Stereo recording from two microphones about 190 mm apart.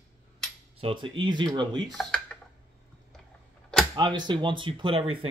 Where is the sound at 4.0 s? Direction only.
25° right (ahead or behind).